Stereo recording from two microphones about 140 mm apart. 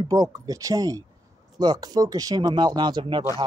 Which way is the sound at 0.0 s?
25° right (ahead or behind).